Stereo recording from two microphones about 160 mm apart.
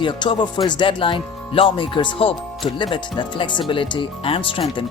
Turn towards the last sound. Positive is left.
turn(degrees=35)  # may be behind; listen again after turning